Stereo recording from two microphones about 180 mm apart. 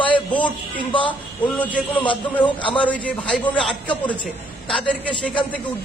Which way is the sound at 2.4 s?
30° left (ahead or behind).